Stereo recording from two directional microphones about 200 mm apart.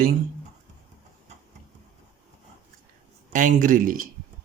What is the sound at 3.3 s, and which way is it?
Speech, 40° right (ahead or behind).